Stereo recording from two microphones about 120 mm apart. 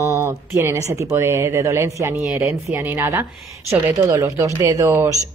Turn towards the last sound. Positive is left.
turn(degrees=-25)  # may be behind; listen again after turning